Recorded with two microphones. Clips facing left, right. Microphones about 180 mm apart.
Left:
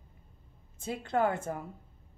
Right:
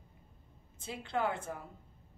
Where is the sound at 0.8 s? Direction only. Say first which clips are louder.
Left 5 dB; 45° left (ahead or behind).